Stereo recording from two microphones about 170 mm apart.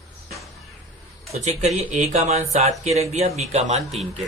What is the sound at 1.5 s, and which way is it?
Speech, 40° right (ahead or behind).